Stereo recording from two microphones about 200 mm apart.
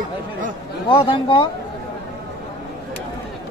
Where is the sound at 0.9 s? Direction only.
25° left (ahead or behind).